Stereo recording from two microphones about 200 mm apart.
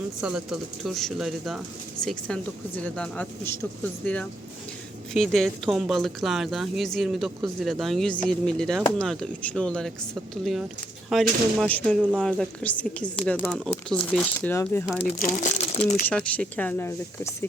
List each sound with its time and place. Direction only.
0.2 s speech: 5° right (ahead or behind); by 14.8 s 10° left (ahead or behind)
15.2 s speech: 45° left (ahead or behind)
16.0 s speech: 5° left (ahead or behind)